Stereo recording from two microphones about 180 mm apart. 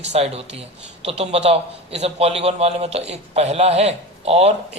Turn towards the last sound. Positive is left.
turn(degrees=-35)  # may be behind; listen again after turning